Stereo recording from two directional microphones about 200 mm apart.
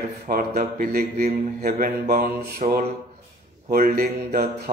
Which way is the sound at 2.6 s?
35° right (ahead or behind).